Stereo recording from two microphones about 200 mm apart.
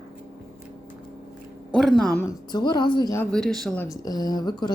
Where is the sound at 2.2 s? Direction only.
20° left (ahead or behind).